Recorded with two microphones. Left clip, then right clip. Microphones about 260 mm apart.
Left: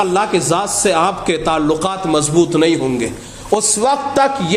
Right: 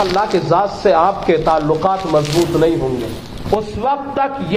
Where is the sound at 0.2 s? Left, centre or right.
Left.